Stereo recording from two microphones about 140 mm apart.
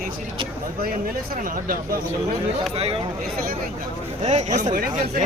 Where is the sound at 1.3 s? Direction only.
85° right.